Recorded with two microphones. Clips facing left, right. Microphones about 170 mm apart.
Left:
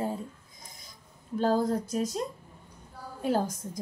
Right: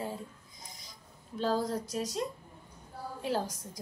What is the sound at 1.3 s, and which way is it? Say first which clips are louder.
Speech: left 5 dB; 50° left (ahead or behind).